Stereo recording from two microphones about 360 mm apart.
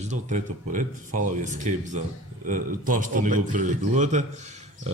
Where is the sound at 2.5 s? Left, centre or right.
Right.